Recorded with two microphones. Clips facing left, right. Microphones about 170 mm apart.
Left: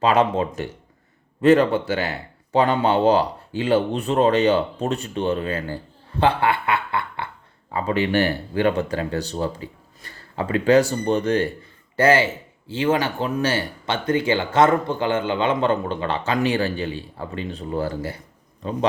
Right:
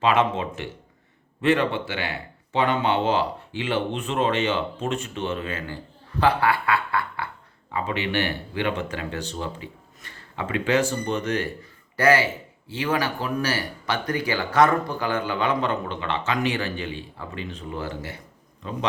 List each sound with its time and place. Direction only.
0.0 s speech: 35° left (ahead or behind)
6.1 s speech: 25° left (ahead or behind)
7.7 s speech: 40° left (ahead or behind)